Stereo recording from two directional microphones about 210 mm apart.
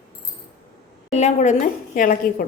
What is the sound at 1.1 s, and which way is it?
A woman's voice, 30° left (ahead or behind).